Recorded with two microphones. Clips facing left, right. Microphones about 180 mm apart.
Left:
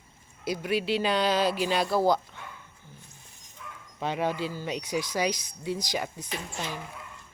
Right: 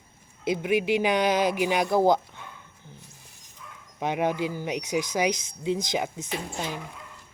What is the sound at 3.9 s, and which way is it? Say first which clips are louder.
Speech: right 3 dB; 15° right (ahead or behind).